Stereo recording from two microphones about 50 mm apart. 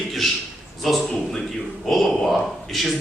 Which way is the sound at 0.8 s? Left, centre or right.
Centre.